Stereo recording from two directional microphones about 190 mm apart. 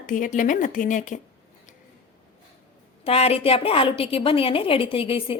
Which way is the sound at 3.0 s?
30° left (ahead or behind).